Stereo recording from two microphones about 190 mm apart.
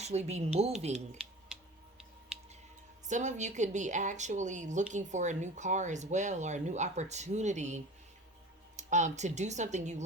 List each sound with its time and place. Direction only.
0.0 s a woman's voice: 35° right (ahead or behind)
0.9 s a sound: 5° right (ahead or behind)
3.1 s a woman's voice: 40° right (ahead or behind)